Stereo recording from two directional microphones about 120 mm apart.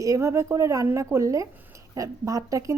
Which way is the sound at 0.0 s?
25° right (ahead or behind).